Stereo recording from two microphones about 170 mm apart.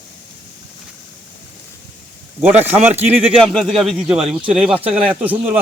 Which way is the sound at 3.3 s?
Centre (ahead or behind).